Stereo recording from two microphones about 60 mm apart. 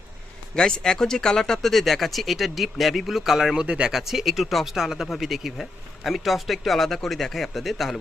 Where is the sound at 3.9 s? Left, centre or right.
Centre.